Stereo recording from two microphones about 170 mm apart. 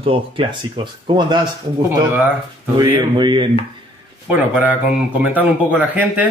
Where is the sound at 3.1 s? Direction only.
30° right (ahead or behind).